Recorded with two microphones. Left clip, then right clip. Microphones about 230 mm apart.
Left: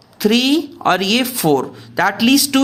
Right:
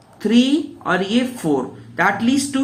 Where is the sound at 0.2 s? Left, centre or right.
Left.